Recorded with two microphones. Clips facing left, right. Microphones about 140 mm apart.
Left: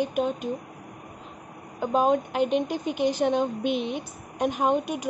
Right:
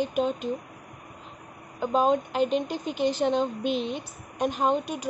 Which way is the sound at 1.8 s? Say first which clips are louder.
Left 1 dB; 10° left (ahead or behind).